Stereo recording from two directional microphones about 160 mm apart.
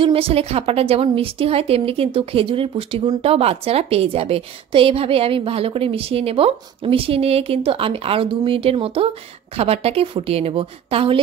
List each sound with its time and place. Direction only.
0.0 s a woman's voice: 35° right (ahead or behind)